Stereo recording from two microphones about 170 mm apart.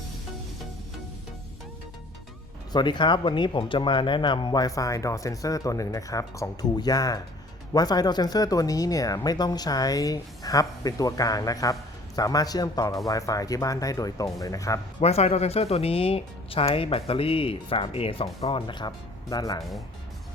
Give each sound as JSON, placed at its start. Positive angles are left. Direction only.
{"t": 2.7, "sound": "speech", "side_deg": 25}
{"t": 15.0, "sound": "speech", "side_deg": 40}